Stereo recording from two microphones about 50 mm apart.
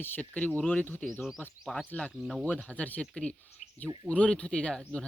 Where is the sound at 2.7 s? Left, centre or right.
Left.